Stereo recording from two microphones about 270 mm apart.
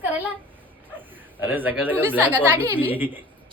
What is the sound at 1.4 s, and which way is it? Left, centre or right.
A man's voice, centre.